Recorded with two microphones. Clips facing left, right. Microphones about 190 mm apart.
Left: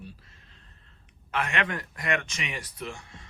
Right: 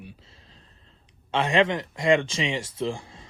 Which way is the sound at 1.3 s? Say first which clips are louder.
Right 8 dB; 30° right (ahead or behind).